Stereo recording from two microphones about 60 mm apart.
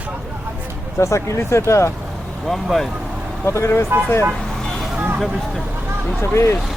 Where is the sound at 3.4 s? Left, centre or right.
Left.